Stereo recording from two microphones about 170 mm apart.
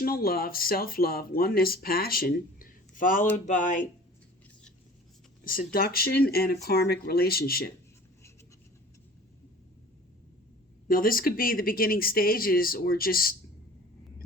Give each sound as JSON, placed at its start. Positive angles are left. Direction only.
{"t": 0.0, "sound": "speech", "side_deg": 60}
{"t": 5.5, "sound": "speech", "side_deg": 60}
{"t": 10.8, "sound": "speech", "side_deg": 55}